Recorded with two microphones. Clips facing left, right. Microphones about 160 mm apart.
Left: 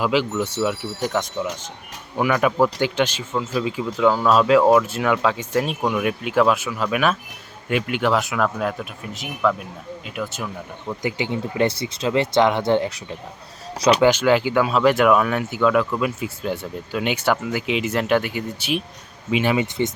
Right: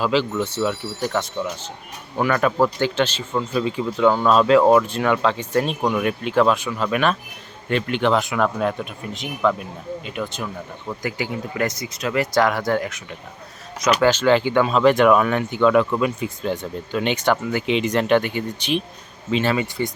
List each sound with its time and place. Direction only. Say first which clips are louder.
0.0 s speech: even; 10° left (ahead or behind)
11.0 s speech: left 2 dB; 25° left (ahead or behind)
14.0 s speech: right 3 dB; 10° left (ahead or behind)